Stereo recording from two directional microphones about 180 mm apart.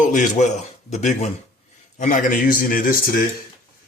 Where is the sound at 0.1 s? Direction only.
40° left (ahead or behind).